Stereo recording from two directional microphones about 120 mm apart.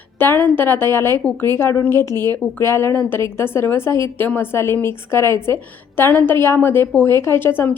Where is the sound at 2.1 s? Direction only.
35° right (ahead or behind).